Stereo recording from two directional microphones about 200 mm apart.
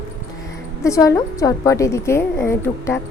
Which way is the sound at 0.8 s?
15° left (ahead or behind).